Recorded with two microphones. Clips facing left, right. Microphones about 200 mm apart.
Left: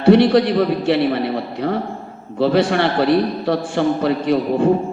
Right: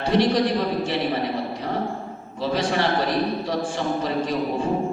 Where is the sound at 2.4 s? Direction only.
60° left (ahead or behind).